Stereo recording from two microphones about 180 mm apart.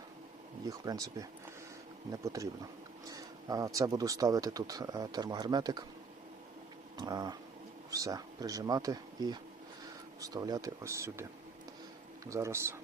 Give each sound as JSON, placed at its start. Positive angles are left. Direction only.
{"t": 0.7, "sound": "speech", "side_deg": -20}
{"t": 3.1, "sound": "a sound", "side_deg": -20}
{"t": 3.8, "sound": "speech", "side_deg": -20}
{"t": 6.9, "sound": "speech", "side_deg": -20}